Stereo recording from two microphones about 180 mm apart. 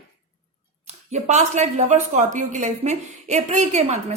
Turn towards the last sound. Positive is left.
turn(degrees=-35)  # may be behind; listen again after turning